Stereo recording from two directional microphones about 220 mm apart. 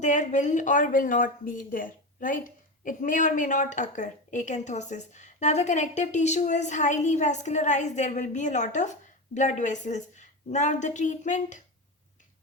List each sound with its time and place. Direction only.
0.0 s speech: 35° left (ahead or behind)